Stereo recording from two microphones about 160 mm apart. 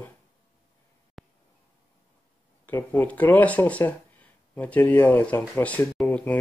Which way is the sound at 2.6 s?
10° left (ahead or behind).